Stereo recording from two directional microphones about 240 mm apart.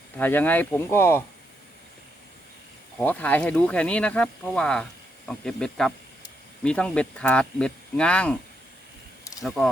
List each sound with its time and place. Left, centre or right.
0.2 s speech: centre
3.0 s speech: centre
9.4 s speech: centre